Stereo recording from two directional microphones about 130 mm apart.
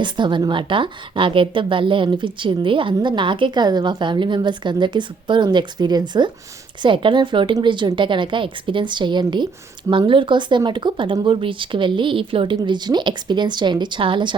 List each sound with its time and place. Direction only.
0.0 s a woman's voice: 35° right (ahead or behind)